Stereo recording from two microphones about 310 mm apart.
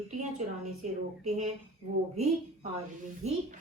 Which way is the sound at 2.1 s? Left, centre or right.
Right.